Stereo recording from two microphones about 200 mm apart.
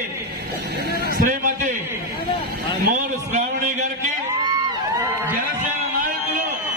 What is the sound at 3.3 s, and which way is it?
Speech, 35° right (ahead or behind).